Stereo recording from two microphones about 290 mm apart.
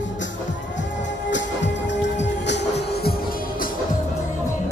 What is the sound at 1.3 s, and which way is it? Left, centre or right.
Music, left.